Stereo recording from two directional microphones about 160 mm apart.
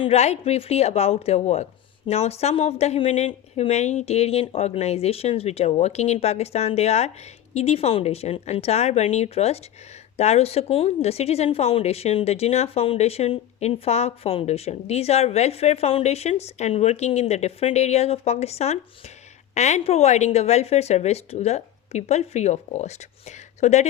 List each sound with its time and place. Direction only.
0.0 s a woman's voice: 40° left (ahead or behind)